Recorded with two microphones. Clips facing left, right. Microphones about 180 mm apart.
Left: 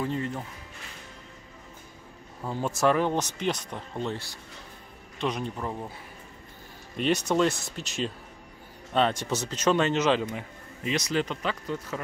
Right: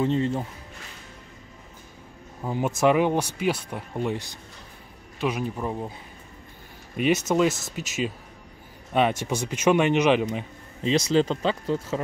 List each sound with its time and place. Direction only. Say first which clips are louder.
0.0 s speech: right 6 dB; 25° right (ahead or behind)
2.4 s speech: right 3 dB; 15° right (ahead or behind)
7.0 s speech: right 3 dB; 5° right (ahead or behind)
10.8 s speech: right 7 dB; 30° right (ahead or behind)